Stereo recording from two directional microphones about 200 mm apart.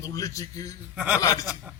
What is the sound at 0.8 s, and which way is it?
Speech, 5° right (ahead or behind).